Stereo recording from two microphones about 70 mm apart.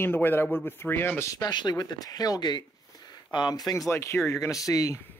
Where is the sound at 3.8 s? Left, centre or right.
Left.